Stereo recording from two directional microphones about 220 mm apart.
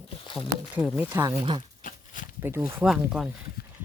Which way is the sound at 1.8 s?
35° left (ahead or behind).